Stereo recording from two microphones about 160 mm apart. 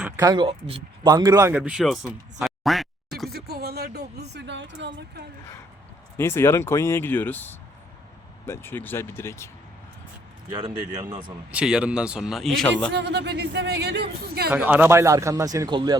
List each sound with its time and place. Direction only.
0.0 s speech: 20° right (ahead or behind); by 3.2 s centre (ahead or behind)
3.2 s a sound: 75° right (ahead or behind)
4.2 s a man's voice: 90° right
6.1 s speech: 15° left (ahead or behind)
10.9 s speech: 25° right (ahead or behind)
11.5 s speech: 5° right (ahead or behind)
12.9 s a man's voice: 90° right
14.5 s speech: 10° right (ahead or behind); by 16.0 s 25° right (ahead or behind)